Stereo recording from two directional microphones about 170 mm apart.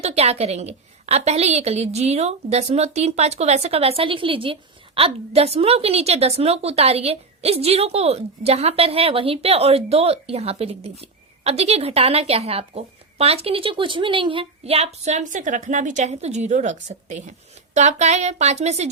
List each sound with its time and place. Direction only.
0.0 s a woman's voice: 40° right (ahead or behind)